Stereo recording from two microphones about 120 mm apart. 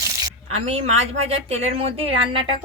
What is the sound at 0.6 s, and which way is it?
Speech, 60° right (ahead or behind).